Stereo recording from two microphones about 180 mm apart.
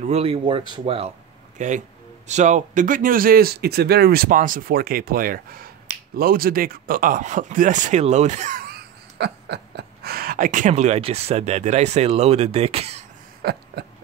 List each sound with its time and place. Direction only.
0.0 s speech: 35° right (ahead or behind)
13.4 s hiccup: 60° right (ahead or behind)